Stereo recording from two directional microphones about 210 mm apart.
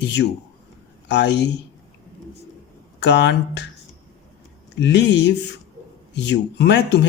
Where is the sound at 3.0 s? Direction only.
55° left (ahead or behind).